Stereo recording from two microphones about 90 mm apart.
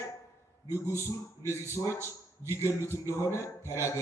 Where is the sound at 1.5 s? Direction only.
30° left (ahead or behind).